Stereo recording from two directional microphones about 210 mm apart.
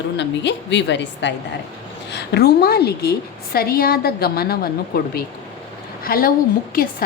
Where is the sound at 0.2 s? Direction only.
55° left (ahead or behind).